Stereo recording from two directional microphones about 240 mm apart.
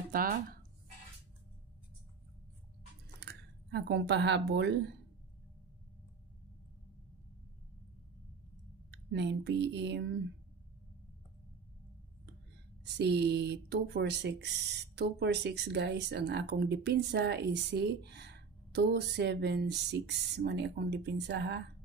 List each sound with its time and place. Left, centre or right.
0.1 s speech: right
3.3 s speech: right
8.9 s speech: right
12.8 s speech: right